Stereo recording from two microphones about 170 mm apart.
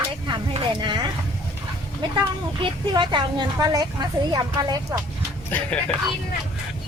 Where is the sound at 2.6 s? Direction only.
30° right (ahead or behind).